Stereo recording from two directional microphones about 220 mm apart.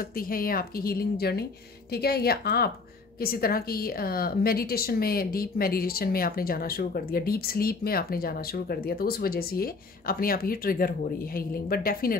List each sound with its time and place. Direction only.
0.3 s a woman's voice: 40° left (ahead or behind)